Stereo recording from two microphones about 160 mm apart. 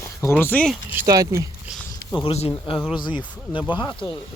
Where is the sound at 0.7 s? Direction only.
10° right (ahead or behind).